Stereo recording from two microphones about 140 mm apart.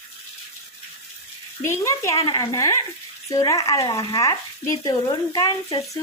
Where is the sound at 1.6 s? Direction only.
20° left (ahead or behind).